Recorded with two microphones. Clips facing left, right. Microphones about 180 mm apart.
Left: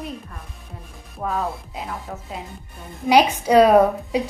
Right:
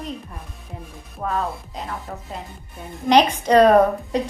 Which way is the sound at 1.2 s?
5° left (ahead or behind).